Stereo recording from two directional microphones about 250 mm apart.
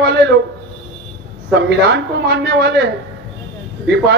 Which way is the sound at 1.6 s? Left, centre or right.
Right.